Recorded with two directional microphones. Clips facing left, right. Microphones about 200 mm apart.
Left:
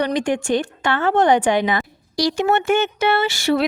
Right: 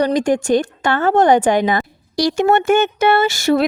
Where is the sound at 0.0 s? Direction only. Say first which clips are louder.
Right 4 dB; 40° right (ahead or behind).